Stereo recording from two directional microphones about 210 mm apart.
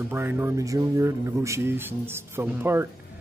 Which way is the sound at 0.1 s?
10° right (ahead or behind).